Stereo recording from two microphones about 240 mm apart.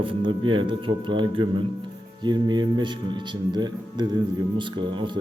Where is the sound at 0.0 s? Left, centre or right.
Right.